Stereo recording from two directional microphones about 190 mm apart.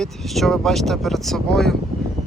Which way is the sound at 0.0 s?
Centre (ahead or behind).